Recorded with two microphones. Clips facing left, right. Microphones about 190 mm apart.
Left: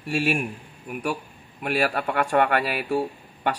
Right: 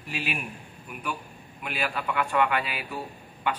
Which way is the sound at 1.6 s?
50° left (ahead or behind).